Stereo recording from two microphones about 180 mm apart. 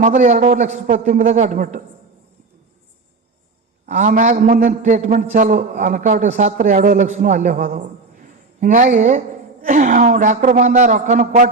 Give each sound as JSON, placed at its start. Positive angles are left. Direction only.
{"t": 0.0, "sound": "a man's voice", "side_deg": -40}
{"t": 3.8, "sound": "a man's voice", "side_deg": -45}